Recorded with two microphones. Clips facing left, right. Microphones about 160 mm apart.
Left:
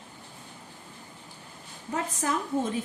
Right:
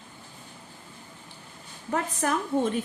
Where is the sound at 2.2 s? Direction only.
70° right (ahead or behind).